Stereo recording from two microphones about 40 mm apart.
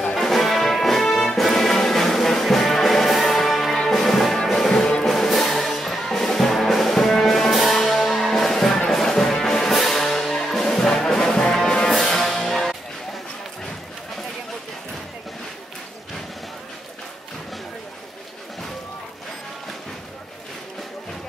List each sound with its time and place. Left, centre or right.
0.1 s music: centre
4.7 s music: left
5.0 s music: centre